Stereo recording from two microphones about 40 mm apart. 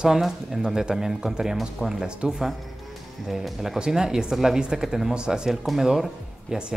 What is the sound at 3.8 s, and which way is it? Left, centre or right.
A man's voice, centre.